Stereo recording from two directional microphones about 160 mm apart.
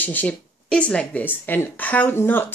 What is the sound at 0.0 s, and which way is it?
Speech, 10° left (ahead or behind).